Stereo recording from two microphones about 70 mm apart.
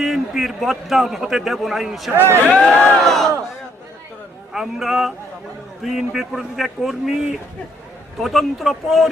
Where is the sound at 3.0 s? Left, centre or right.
Centre.